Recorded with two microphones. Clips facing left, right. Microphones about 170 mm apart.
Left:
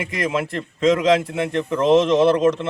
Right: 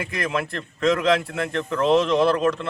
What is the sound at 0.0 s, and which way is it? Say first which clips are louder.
A man's voice: left 3 dB; 20° left (ahead or behind).